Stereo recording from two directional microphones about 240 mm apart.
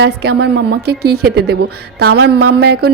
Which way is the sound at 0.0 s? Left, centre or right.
Right.